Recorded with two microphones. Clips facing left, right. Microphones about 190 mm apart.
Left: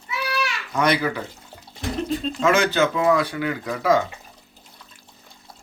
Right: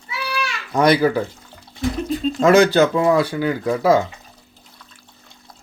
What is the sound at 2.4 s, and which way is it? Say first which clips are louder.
Speech: right 7 dB; 35° right (ahead or behind).